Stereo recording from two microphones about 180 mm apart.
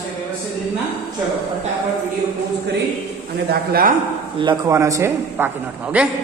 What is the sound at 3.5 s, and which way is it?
Speech, 55° right (ahead or behind).